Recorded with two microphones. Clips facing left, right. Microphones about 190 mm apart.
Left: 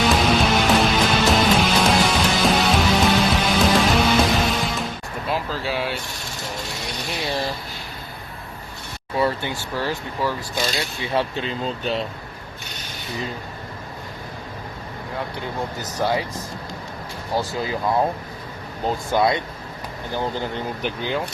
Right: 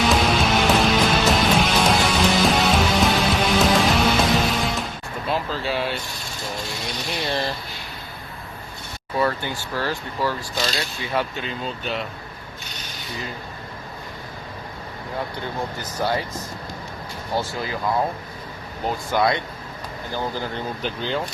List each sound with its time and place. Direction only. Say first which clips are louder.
0.0 s music: left 1 dB; centre (ahead or behind)
5.3 s a sound: right 1 dB; 10° left (ahead or behind)
9.1 s speech: left 1 dB; 20° left (ahead or behind)
18.9 s speech: left 1 dB; 20° left (ahead or behind)